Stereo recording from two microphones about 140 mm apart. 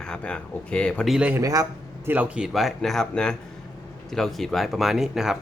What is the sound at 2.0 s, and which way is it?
Speech, 10° right (ahead or behind).